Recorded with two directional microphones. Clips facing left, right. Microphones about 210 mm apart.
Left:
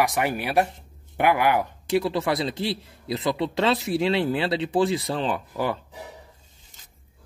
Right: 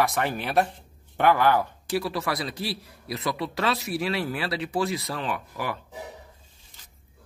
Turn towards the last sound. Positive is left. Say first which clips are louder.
# left 5 dB
turn(degrees=25)  # may be behind; listen again after turning